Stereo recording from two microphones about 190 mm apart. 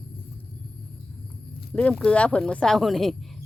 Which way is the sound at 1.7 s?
5° left (ahead or behind).